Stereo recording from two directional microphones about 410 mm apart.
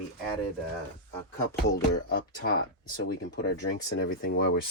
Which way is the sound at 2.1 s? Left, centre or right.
Left.